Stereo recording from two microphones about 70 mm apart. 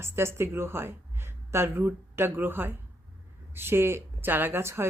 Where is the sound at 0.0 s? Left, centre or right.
Right.